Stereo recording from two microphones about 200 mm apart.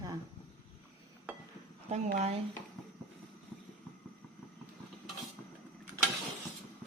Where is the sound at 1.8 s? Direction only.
35° right (ahead or behind).